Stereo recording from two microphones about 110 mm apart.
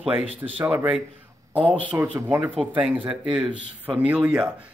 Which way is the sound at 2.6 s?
5° right (ahead or behind).